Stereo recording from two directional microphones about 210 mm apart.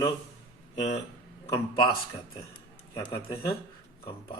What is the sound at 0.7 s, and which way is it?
Speech, 35° left (ahead or behind).